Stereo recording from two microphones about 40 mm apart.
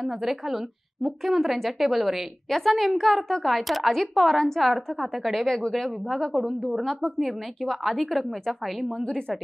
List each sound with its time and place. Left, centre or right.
0.0 s speech: centre
6.3 s speech: centre
6.8 s speech: centre
7.2 s speech: centre